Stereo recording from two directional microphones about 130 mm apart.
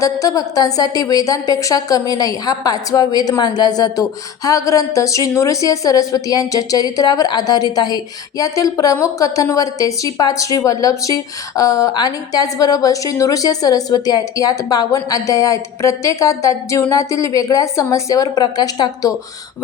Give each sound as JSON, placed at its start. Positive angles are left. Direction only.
{"t": 0.0, "sound": "a woman's voice", "side_deg": 25}